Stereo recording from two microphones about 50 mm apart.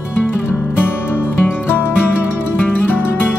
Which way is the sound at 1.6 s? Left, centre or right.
Left.